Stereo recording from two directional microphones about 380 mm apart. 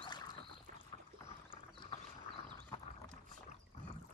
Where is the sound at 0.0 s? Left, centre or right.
Centre.